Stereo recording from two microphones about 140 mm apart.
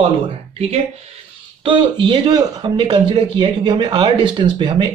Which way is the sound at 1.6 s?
35° right (ahead or behind).